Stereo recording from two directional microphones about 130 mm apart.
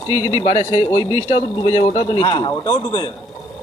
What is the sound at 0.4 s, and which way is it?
Speech, 60° left (ahead or behind).